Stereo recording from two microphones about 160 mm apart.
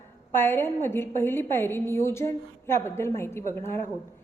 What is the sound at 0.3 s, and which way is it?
A woman's voice, 15° left (ahead or behind).